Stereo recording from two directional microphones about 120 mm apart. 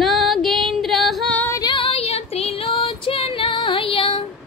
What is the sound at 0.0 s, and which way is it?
Female singing, centre (ahead or behind).